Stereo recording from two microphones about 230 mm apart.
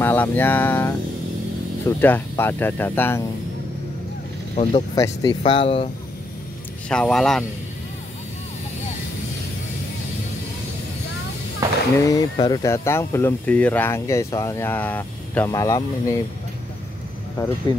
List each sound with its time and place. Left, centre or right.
0.0 s speech: centre
4.6 s speech: centre
6.9 s speech: centre
12.0 s speech: centre
17.7 s speech: centre